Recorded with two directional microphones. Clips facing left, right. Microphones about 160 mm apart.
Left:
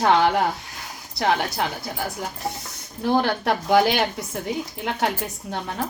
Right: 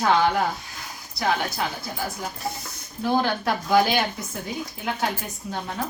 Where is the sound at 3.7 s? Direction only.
75° left (ahead or behind).